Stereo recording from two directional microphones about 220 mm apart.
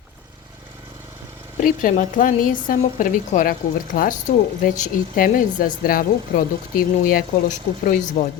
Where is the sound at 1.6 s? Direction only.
40° left (ahead or behind).